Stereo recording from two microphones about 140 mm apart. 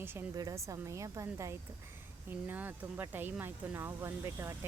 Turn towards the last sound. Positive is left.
turn(degrees=-20)  # may be behind; listen again after turning